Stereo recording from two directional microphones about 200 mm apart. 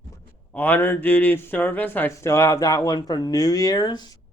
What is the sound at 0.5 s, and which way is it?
Speech, 10° left (ahead or behind).